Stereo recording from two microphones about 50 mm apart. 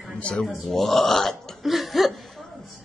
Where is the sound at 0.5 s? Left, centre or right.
Centre.